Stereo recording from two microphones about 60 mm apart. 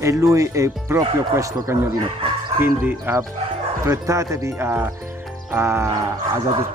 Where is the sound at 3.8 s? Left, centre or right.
Right.